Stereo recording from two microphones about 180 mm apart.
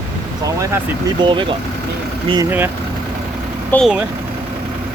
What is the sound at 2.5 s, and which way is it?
Speech, 10° right (ahead or behind).